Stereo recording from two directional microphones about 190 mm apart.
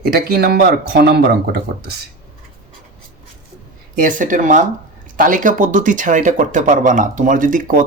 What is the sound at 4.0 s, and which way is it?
Speech, 45° right (ahead or behind).